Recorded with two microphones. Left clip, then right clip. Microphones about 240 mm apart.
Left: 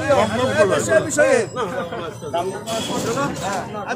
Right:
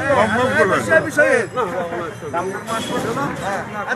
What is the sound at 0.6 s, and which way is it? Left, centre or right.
Speech, left.